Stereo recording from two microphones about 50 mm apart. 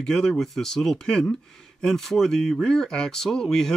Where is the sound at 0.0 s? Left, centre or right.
Centre.